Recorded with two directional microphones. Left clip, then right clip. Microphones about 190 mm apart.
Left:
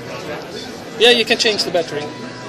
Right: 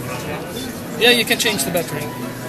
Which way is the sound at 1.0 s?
40° left (ahead or behind).